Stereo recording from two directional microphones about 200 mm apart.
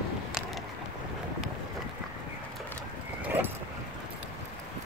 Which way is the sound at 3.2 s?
10° right (ahead or behind).